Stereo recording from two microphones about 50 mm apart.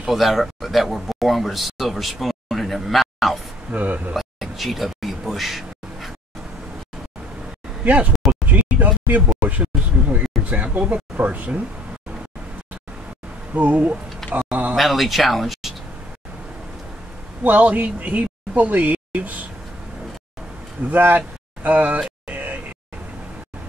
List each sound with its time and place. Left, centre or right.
0.0 s speech: centre
3.7 s speech: right
4.1 s a sound: centre
7.8 s speech: right
13.5 s speech: right
14.5 s a sound: right
14.8 s speech: centre
17.4 s speech: right
20.9 s speech: right
22.3 s a sound: right